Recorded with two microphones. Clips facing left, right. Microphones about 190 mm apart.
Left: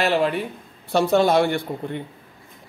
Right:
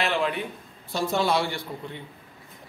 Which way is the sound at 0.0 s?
45° left (ahead or behind).